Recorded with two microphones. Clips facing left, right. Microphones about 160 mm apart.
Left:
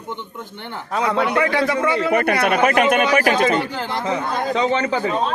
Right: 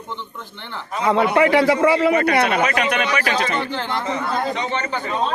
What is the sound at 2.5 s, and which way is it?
Speech, 50° left (ahead or behind).